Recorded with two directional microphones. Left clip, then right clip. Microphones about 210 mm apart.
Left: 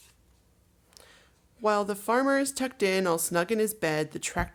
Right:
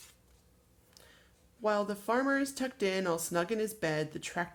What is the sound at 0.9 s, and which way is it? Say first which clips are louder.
Speech: left 5 dB; 30° left (ahead or behind).